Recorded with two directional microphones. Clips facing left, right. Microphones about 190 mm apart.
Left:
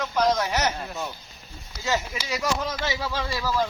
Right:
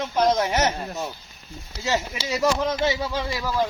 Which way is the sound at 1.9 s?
25° right (ahead or behind).